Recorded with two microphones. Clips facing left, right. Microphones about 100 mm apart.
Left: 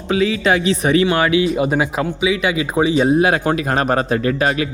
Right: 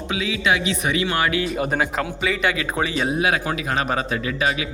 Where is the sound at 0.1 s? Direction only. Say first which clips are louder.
Left 6 dB; 40° left (ahead or behind).